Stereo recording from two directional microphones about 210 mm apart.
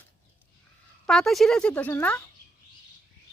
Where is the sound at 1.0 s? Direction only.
Centre (ahead or behind).